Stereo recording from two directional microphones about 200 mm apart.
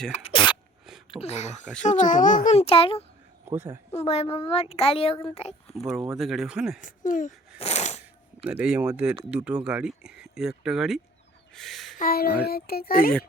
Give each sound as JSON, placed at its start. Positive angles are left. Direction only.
{"t": 0.1, "sound": "a sound", "side_deg": 30}
{"t": 0.9, "sound": "a sound", "side_deg": 0}
{"t": 1.2, "sound": "a child's voice", "side_deg": 35}
{"t": 3.4, "sound": "a woman's voice", "side_deg": -10}
{"t": 3.9, "sound": "speech", "side_deg": 30}
{"t": 6.1, "sound": "speech", "side_deg": 0}
{"t": 6.8, "sound": "a child's voice", "side_deg": 40}
{"t": 7.6, "sound": "shuffling cards", "side_deg": 35}
{"t": 8.4, "sound": "speech", "side_deg": -5}
{"t": 11.5, "sound": "a sound", "side_deg": 0}
{"t": 11.9, "sound": "a child's voice", "side_deg": 50}